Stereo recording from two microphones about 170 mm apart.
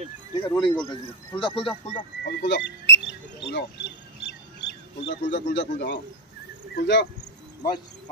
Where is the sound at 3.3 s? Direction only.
90° left.